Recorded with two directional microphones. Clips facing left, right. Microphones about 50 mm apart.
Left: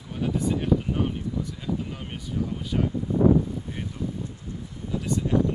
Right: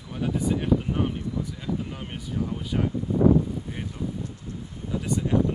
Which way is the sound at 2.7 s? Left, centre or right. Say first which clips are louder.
Left 1 dB; centre.